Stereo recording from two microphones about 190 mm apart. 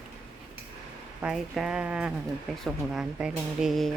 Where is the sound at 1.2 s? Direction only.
5° right (ahead or behind).